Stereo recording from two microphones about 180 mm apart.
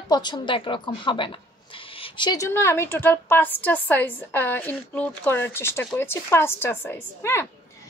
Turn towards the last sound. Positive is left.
turn(degrees=15)  # may be behind; listen again after turning